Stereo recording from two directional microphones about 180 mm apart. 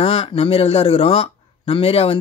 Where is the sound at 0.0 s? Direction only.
35° left (ahead or behind).